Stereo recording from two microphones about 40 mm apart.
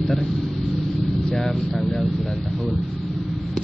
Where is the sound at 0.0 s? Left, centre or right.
Centre.